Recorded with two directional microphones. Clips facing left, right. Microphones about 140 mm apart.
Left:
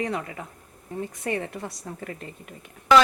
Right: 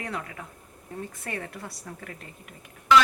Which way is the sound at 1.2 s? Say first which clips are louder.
Left 6 dB; 20° left (ahead or behind).